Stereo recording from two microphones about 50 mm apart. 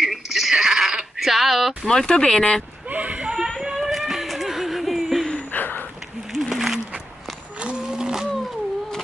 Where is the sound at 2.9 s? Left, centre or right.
Right.